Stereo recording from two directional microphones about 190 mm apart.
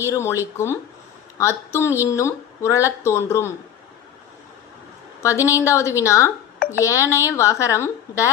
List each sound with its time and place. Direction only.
0.1 s speech: 15° left (ahead or behind)
5.2 s speech: 15° left (ahead or behind)